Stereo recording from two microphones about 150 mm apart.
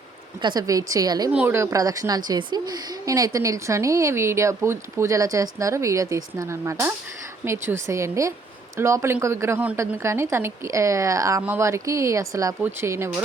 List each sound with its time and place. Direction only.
0.4 s a woman's voice: 25° right (ahead or behind)
1.3 s a woman's voice: 10° right (ahead or behind)